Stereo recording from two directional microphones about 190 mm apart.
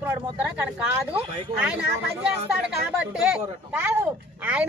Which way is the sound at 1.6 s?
5° right (ahead or behind).